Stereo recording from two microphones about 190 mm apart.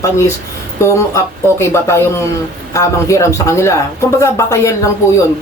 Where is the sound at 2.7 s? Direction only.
15° left (ahead or behind).